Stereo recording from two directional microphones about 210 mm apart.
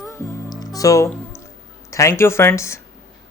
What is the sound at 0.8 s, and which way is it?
Speech, 15° left (ahead or behind).